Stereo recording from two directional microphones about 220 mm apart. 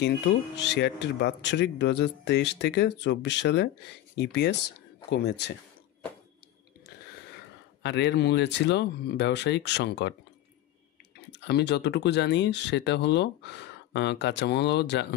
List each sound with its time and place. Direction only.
0.6 s speech: 50° left (ahead or behind)
7.8 s speech: 50° left (ahead or behind)
11.1 s speech: 50° left (ahead or behind)